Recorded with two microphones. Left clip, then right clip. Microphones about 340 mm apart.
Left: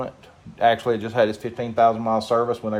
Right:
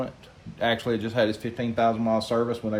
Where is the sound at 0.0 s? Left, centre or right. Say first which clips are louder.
Left 2 dB; centre.